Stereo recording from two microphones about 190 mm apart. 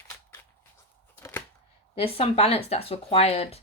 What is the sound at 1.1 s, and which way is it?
Chopping, 15° left (ahead or behind).